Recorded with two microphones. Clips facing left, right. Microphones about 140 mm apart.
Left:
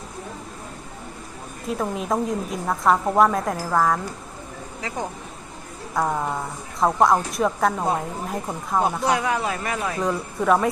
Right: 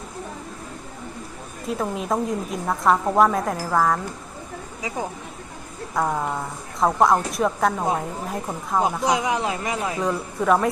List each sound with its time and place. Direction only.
1.6 s a woman's voice: centre (ahead or behind)
5.9 s a woman's voice: centre (ahead or behind)
9.0 s speech: 15° right (ahead or behind)
10.0 s a woman's voice: centre (ahead or behind)